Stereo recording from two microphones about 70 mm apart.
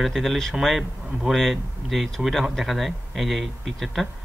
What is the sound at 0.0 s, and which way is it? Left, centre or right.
Speech, centre.